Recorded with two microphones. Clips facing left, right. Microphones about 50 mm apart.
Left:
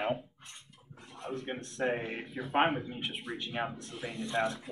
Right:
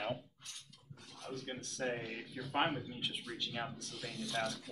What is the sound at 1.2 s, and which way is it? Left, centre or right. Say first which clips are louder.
A man's voice: left 6 dB; left.